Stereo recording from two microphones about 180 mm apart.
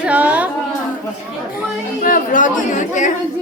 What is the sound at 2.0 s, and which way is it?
Speech, 50° left (ahead or behind).